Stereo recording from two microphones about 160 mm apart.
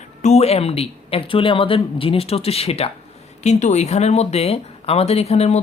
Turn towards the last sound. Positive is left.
turn(degrees=40)  # may be behind; listen again after turning